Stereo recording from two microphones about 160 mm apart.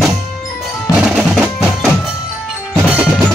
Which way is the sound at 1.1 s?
5° right (ahead or behind).